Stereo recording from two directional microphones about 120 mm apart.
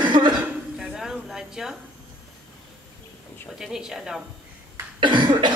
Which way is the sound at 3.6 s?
5° right (ahead or behind).